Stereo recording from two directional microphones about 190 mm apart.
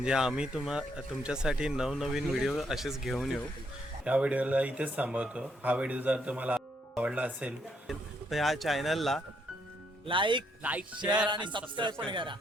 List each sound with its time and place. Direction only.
0.0 s speech: 5° right (ahead or behind)
10.1 s speech: 25° right (ahead or behind)
10.6 s speech: 5° right (ahead or behind)
11.3 s speech: 25° right (ahead or behind)